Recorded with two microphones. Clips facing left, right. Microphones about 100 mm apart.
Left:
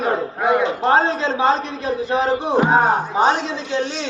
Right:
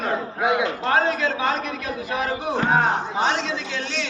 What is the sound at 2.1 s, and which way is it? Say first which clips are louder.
Speech: left 6 dB; 30° left (ahead or behind).